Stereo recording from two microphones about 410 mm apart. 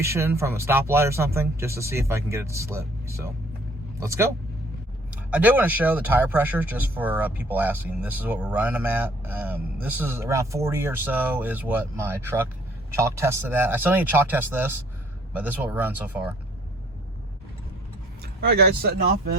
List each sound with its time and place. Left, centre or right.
0.0 s speech: centre
4.0 s speech: centre
18.3 s speech: right